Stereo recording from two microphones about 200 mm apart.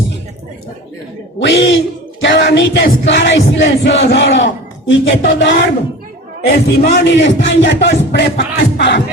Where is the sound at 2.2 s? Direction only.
65° left (ahead or behind).